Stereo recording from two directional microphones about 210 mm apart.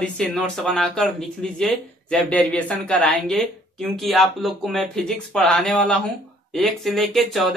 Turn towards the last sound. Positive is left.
turn(degrees=0)  # may be behind; listen again after turning